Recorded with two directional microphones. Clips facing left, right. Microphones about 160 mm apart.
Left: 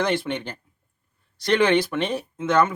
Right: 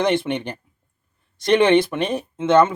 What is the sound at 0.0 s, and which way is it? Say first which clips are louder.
Speech: right 4 dB; 20° right (ahead or behind).